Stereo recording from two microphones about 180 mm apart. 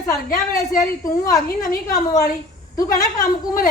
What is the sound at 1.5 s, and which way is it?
Speech, 55° left (ahead or behind).